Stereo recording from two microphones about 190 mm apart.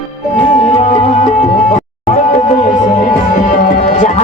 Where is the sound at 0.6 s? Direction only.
35° left (ahead or behind).